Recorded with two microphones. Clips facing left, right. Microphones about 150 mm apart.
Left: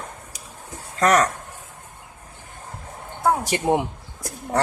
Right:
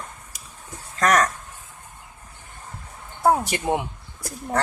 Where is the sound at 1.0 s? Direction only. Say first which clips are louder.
Left 2 dB; 30° left (ahead or behind).